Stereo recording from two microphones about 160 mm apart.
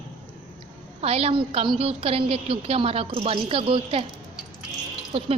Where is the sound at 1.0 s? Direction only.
40° right (ahead or behind).